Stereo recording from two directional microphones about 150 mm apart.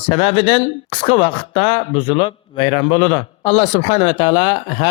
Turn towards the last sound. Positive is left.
turn(degrees=35)  # may be behind; listen again after turning